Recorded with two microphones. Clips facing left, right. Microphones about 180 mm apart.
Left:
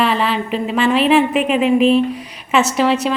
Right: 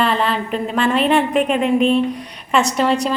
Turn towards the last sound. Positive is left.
turn(degrees=0)  # may be behind; listen again after turning